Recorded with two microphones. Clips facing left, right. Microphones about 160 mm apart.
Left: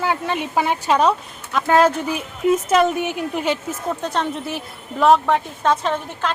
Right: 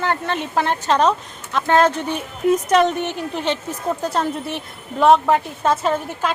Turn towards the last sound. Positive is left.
turn(degrees=-5)  # may be behind; listen again after turning